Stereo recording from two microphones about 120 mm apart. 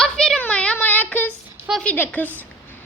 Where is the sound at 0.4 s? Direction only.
10° left (ahead or behind).